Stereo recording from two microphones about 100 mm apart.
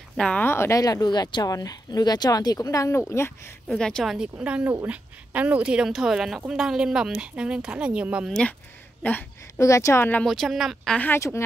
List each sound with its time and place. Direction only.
0.2 s speech: 10° left (ahead or behind)
0.5 s speech: 25° left (ahead or behind)
3.6 s speech: 5° left (ahead or behind)
4.4 s speech: 15° right (ahead or behind)
8.3 s speech: 10° left (ahead or behind)
9.6 s speech: 30° left (ahead or behind)
10.2 s speech: centre (ahead or behind)
11.1 s speech: 30° left (ahead or behind)